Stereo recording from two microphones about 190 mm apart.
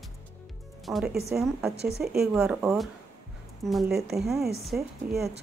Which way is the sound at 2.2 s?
5° right (ahead or behind).